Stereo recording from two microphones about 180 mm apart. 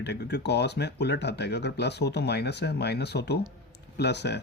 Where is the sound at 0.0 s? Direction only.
70° left (ahead or behind).